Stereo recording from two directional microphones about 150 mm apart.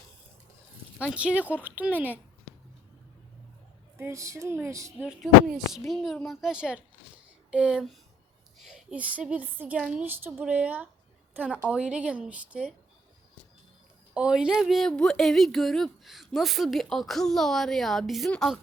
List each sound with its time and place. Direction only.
0.9 s a woman's voice: 10° right (ahead or behind)
3.9 s speech: 20° right (ahead or behind)
5.0 s a woman's voice: 5° right (ahead or behind)
14.1 s a woman's voice: 5° right (ahead or behind)